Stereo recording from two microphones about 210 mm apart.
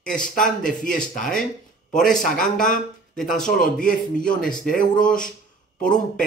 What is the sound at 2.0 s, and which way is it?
Speech, centre (ahead or behind).